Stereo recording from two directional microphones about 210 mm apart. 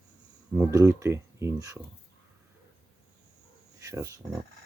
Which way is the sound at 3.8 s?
15° right (ahead or behind).